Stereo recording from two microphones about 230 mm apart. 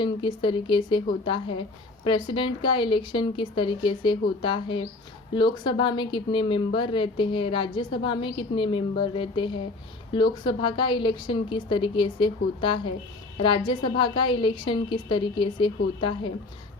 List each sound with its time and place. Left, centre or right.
0.0 s speech: centre